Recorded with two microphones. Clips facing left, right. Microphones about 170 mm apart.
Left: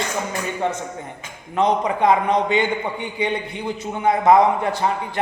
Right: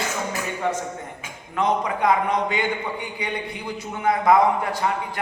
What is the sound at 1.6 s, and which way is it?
A man's voice, 20° left (ahead or behind).